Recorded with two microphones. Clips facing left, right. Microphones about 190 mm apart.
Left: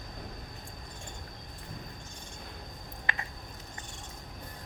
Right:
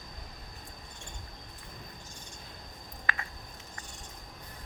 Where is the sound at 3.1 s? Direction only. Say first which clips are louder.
Right 1 dB; 20° left (ahead or behind).